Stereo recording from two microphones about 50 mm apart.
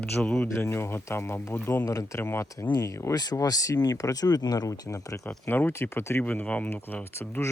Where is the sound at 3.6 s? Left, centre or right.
Left.